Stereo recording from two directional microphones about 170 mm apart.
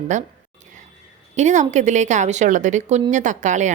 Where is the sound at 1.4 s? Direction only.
45° right (ahead or behind).